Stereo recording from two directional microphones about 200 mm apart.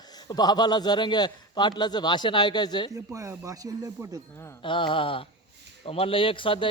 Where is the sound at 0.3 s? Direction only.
20° left (ahead or behind).